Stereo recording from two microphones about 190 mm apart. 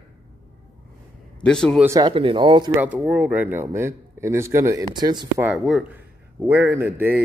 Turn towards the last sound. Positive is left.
turn(degrees=-10)  # may be behind; listen again after turning